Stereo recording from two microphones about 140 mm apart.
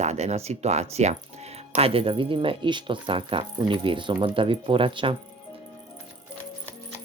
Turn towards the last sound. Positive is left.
turn(degrees=-35)  # may be behind; listen again after turning